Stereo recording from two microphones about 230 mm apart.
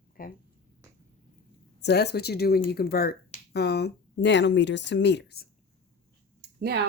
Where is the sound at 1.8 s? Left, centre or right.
Left.